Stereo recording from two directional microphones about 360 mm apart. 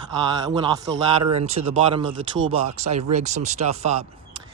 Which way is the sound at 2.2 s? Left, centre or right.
Right.